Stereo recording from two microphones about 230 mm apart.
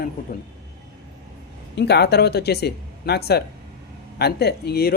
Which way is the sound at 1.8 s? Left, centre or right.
Left.